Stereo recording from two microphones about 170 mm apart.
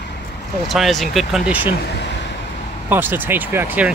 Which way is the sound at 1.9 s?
90° left.